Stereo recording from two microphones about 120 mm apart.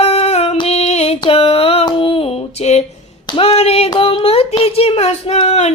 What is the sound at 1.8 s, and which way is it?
Female singing, 50° left (ahead or behind).